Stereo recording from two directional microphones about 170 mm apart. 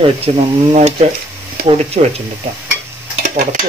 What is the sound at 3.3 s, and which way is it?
Stir, 60° right (ahead or behind).